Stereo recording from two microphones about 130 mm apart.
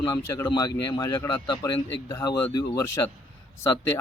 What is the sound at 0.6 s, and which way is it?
Speech, 30° left (ahead or behind).